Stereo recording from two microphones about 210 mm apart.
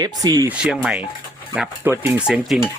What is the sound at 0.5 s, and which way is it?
Speech, 5° right (ahead or behind).